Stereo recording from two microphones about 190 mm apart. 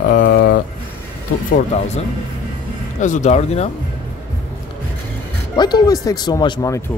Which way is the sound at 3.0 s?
40° left (ahead or behind).